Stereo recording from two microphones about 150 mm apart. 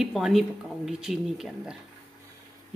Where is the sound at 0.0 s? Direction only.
Centre (ahead or behind).